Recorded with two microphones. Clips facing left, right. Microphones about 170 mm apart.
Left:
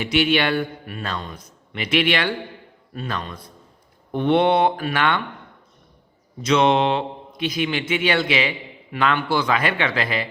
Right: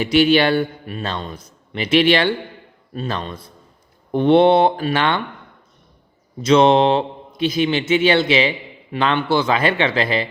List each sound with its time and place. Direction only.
0.0 s a man's voice: 35° right (ahead or behind)
6.4 s a man's voice: 30° right (ahead or behind)